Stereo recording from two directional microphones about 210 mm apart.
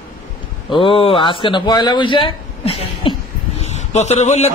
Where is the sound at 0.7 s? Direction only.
25° left (ahead or behind).